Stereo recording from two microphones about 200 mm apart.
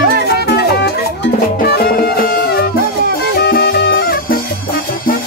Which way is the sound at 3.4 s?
50° left (ahead or behind).